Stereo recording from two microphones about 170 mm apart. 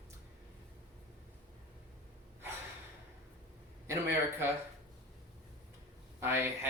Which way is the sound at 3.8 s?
15° right (ahead or behind).